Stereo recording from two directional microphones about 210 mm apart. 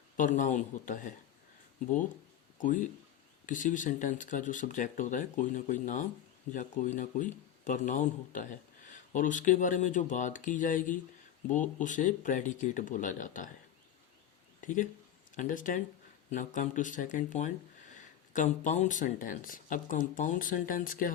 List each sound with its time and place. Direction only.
0.2 s speech: 35° left (ahead or behind)
2.6 s speech: 40° left (ahead or behind)
14.6 s speech: 40° left (ahead or behind)